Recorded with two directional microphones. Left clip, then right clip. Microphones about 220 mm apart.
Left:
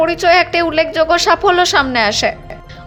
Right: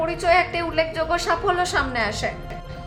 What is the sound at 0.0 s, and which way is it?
Speech, 35° left (ahead or behind).